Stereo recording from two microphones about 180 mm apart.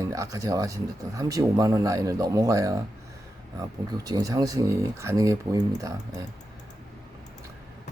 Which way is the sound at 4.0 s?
20° right (ahead or behind).